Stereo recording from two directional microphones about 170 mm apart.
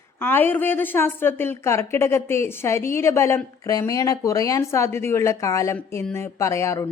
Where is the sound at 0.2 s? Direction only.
10° left (ahead or behind).